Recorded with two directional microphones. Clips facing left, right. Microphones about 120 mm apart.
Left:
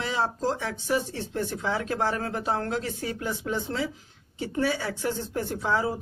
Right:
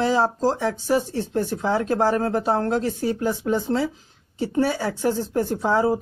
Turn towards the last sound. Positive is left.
turn(degrees=-40)  # may be behind; listen again after turning